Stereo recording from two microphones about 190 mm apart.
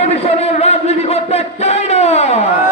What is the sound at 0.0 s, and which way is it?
Music, 35° left (ahead or behind).